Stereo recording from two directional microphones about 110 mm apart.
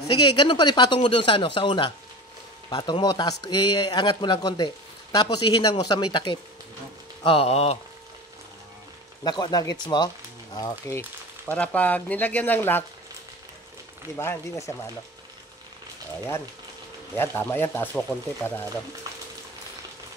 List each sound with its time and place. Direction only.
0.2 s speech: 45° left (ahead or behind)
2.7 s speech: 40° left (ahead or behind)
7.2 s speech: 65° left (ahead or behind)
9.2 s speech: 40° left (ahead or behind)
11.5 s speech: 15° left (ahead or behind)
14.1 s speech: 25° left (ahead or behind)
17.1 s speech: 20° left (ahead or behind)